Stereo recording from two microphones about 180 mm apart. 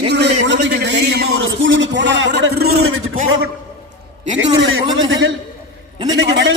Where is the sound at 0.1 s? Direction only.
70° right (ahead or behind).